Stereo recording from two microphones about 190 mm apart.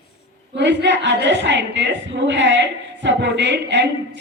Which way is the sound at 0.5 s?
65° right (ahead or behind).